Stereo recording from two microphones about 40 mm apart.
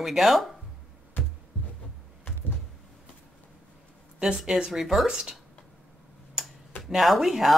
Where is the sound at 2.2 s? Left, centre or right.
Left.